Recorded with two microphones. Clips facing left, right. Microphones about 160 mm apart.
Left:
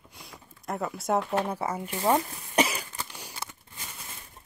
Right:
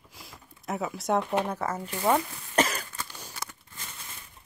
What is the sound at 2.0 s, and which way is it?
Speech, 25° left (ahead or behind).